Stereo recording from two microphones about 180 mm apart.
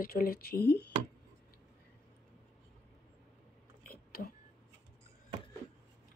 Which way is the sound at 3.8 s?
55° left (ahead or behind).